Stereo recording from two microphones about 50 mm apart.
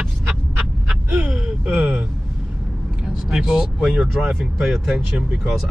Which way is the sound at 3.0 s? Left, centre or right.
Centre.